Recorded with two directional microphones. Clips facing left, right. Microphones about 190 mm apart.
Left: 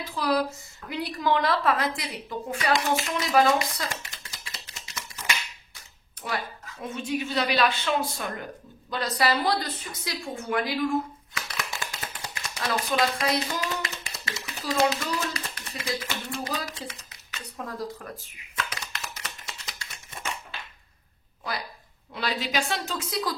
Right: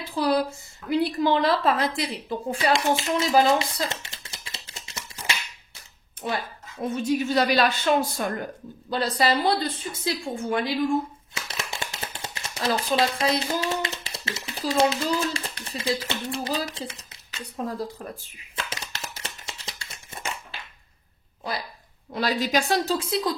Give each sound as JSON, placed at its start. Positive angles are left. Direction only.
{"t": 0.0, "sound": "a woman's voice", "side_deg": -30}
{"t": 6.8, "sound": "a woman's voice", "side_deg": -40}
{"t": 8.9, "sound": "a woman's voice", "side_deg": -30}
{"t": 11.3, "sound": "shuffling cards", "side_deg": -25}
{"t": 14.5, "sound": "a sound", "side_deg": -30}
{"t": 22.1, "sound": "a woman's voice", "side_deg": -40}